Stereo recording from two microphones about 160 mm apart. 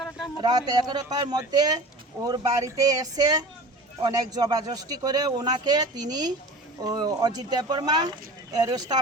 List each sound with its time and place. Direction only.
0.4 s speech: 25° right (ahead or behind)